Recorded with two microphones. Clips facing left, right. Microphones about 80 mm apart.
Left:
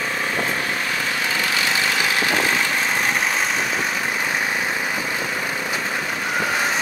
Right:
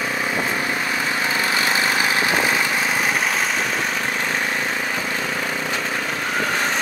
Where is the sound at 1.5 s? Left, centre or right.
Right.